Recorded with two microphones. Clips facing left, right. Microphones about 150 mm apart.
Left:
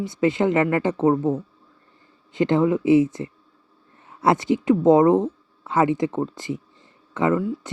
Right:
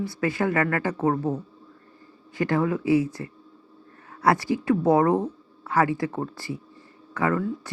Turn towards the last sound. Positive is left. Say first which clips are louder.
# left 4 dB
turn(degrees=20)  # may be behind; listen again after turning